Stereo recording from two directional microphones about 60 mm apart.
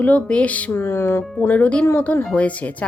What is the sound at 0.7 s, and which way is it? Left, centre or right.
Speech, left.